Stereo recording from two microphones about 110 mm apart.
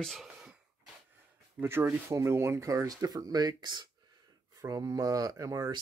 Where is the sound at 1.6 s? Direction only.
20° right (ahead or behind).